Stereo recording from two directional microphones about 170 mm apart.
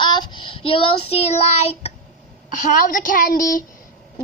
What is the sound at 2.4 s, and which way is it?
A woman's voice, 50° left (ahead or behind).